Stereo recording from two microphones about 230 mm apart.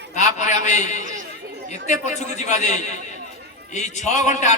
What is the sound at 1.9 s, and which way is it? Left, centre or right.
Speech, left.